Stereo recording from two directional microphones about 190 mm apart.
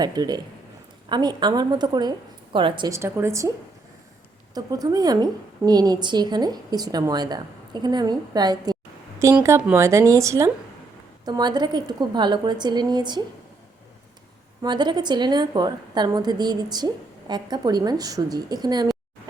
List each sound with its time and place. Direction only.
0.0 s a woman's voice: 20° right (ahead or behind)
4.5 s a woman's voice: 20° right (ahead or behind)
14.6 s a woman's voice: 25° right (ahead or behind)